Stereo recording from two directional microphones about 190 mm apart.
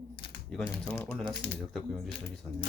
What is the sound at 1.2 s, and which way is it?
Speech, centre (ahead or behind).